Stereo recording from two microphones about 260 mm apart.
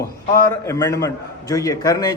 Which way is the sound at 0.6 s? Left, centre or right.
Centre.